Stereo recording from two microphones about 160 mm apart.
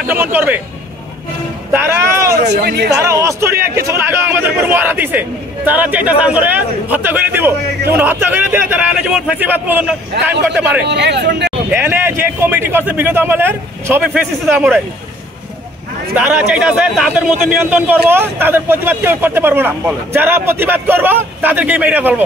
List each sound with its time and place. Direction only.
0.1 s speech: 15° right (ahead or behind)
1.7 s speech: 15° right (ahead or behind)
2.3 s speech: 90° right
3.0 s speech: 20° right (ahead or behind)
10.8 s speech: 90° right
11.7 s speech: 10° right (ahead or behind)
16.2 s speech: 10° right (ahead or behind)